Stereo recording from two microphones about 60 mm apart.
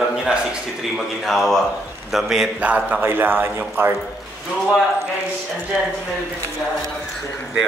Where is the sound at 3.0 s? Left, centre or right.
Right.